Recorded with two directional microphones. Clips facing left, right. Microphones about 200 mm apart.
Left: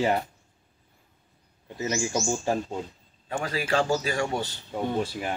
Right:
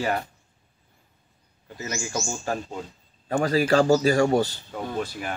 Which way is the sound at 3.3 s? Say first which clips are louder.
Right 7 dB; 40° right (ahead or behind).